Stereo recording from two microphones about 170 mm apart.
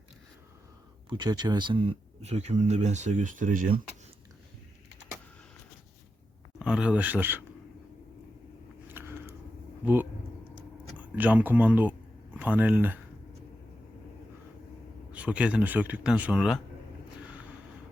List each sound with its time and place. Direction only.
1.1 s speech: 25° right (ahead or behind); by 3.7 s 50° right (ahead or behind)
6.6 s speech: 5° right (ahead or behind)
8.9 s biting: 15° right (ahead or behind)
9.8 s speech: 10° right (ahead or behind)
15.1 s speech: 5° right (ahead or behind)